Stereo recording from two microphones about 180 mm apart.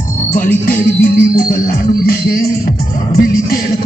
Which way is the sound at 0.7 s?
55° left (ahead or behind).